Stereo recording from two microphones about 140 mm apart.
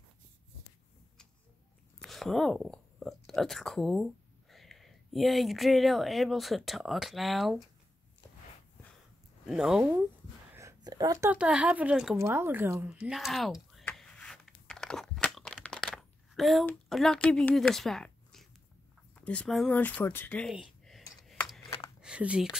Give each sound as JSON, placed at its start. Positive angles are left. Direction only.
{"t": 2.0, "sound": "speech", "side_deg": 0}
{"t": 9.5, "sound": "speech", "side_deg": -5}
{"t": 10.5, "sound": "a sound", "side_deg": -20}
{"t": 11.2, "sound": "speech", "side_deg": -10}
{"t": 12.2, "sound": "speech", "side_deg": -20}
{"t": 13.9, "sound": "crunch", "side_deg": 5}
{"t": 16.9, "sound": "speech", "side_deg": 5}
{"t": 20.8, "sound": "computer keyboard", "side_deg": 0}
{"t": 22.0, "sound": "speech", "side_deg": -10}